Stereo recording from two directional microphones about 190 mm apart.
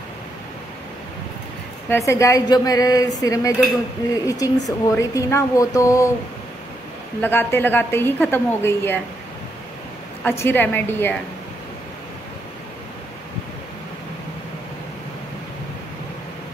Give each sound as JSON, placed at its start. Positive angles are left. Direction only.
{"t": 1.9, "sound": "a woman's voice", "side_deg": 15}
{"t": 7.2, "sound": "speech", "side_deg": 10}
{"t": 10.2, "sound": "speech", "side_deg": 10}